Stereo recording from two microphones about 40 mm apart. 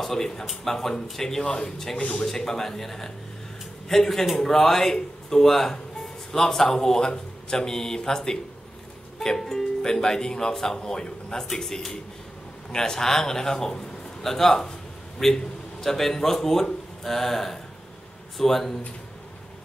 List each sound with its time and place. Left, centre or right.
0.0 s a man's voice: centre
1.4 s speech: left
2.2 s a man's voice: centre